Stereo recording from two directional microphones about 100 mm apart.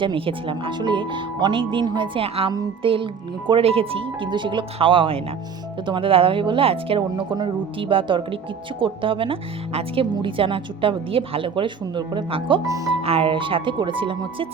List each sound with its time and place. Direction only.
0.0 s speech: 60° right (ahead or behind); by 2.5 s 75° right (ahead or behind)
2.8 s speech: 60° right (ahead or behind)
12.6 s speech: 35° right (ahead or behind)
13.0 s speech: 75° right (ahead or behind); by 14.4 s 60° right (ahead or behind)